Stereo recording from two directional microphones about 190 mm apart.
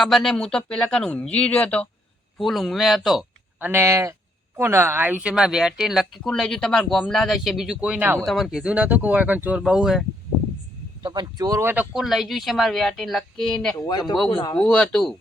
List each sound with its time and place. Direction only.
0.0 s speech: centre (ahead or behind)
11.0 s speech: 20° right (ahead or behind); by 13.7 s centre (ahead or behind)
13.7 s a man's voice: 20° left (ahead or behind)
14.5 s speech: 5° left (ahead or behind)